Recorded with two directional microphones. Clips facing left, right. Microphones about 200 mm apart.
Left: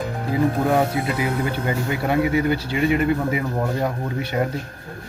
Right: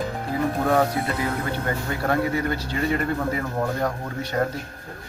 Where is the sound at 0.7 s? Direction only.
10° left (ahead or behind).